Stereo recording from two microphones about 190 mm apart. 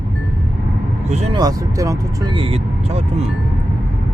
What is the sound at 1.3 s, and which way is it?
Speech, 20° right (ahead or behind).